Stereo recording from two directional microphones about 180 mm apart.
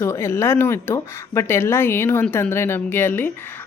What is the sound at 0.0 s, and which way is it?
Speech, 15° left (ahead or behind).